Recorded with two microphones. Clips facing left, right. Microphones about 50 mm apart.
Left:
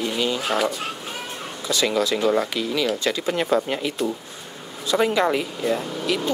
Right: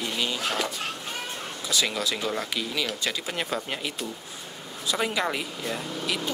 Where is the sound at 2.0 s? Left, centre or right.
Centre.